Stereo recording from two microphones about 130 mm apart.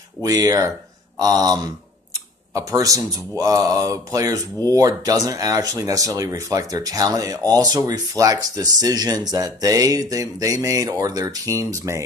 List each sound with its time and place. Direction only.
0.2 s speech: 25° right (ahead or behind)